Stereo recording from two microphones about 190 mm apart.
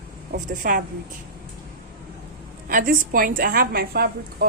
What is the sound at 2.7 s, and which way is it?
A woman's voice, 45° right (ahead or behind).